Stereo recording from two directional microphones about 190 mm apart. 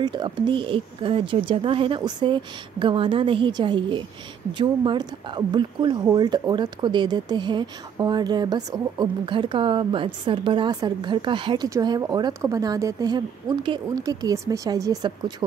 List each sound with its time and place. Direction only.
0.0 s speech: 25° right (ahead or behind)